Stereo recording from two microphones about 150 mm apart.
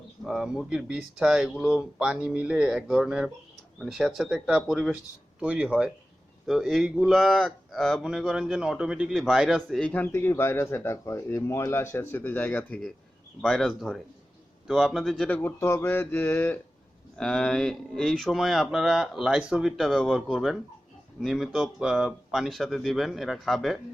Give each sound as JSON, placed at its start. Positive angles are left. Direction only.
{"t": 0.3, "sound": "speech", "side_deg": 0}
{"t": 17.2, "sound": "speech", "side_deg": 5}